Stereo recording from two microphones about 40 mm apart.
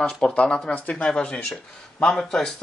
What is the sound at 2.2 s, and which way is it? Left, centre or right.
Speech, centre.